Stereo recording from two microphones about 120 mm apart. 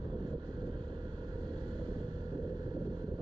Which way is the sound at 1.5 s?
35° right (ahead or behind).